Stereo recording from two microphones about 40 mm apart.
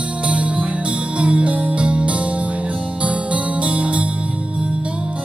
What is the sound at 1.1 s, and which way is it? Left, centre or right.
Music, right.